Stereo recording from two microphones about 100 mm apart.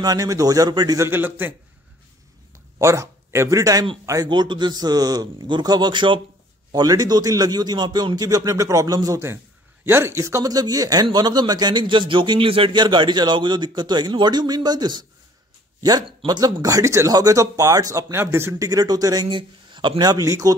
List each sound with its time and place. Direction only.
0.0 s speech: 40° right (ahead or behind)
0.9 s a man's voice: 25° right (ahead or behind)
2.5 s speech: 30° right (ahead or behind)
4.3 s a man's voice: 50° right (ahead or behind)
6.7 s a man's voice: 40° right (ahead or behind)
16.3 s speech: 45° right (ahead or behind)
19.2 s speech: 55° right (ahead or behind)
20.0 s speech: 35° right (ahead or behind)